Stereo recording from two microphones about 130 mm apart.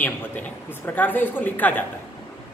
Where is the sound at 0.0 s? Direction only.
15° left (ahead or behind).